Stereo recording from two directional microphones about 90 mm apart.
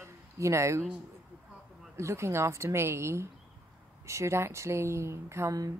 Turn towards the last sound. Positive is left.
turn(degrees=-40)  # may be behind; listen again after turning